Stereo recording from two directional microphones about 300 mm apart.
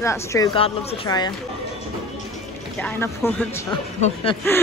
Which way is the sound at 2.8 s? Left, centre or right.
Centre.